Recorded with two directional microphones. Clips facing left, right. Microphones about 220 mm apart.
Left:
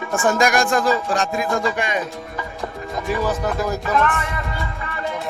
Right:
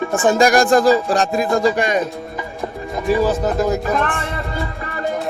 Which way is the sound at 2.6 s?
30° right (ahead or behind).